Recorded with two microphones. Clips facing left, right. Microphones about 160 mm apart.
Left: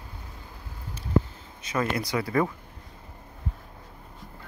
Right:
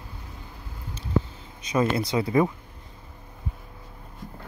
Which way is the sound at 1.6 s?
20° right (ahead or behind).